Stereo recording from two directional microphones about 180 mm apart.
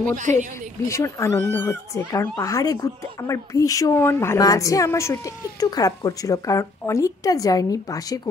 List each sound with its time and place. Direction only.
0.0 s speech: 45° right (ahead or behind)
0.8 s speech: 15° left (ahead or behind)